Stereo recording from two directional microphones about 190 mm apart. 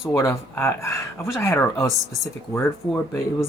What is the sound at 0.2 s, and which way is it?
Speech, 15° left (ahead or behind).